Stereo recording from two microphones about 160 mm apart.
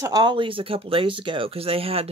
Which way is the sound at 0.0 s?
25° right (ahead or behind).